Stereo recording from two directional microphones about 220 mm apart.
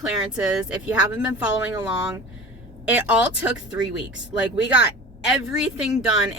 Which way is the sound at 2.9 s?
5° right (ahead or behind).